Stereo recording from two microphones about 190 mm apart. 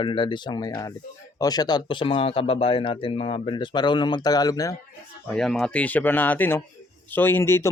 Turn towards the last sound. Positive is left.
turn(degrees=15)  # may be behind; listen again after turning